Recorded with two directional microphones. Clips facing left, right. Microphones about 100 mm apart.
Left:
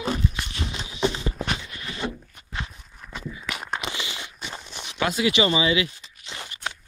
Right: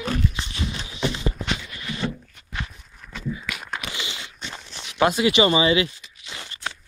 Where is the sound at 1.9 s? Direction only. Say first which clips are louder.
Right 1 dB; 15° left (ahead or behind).